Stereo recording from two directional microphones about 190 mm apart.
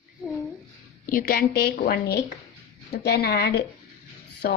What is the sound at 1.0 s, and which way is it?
A woman's voice, 50° left (ahead or behind).